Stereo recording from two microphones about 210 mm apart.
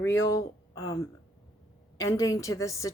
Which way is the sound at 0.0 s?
15° left (ahead or behind).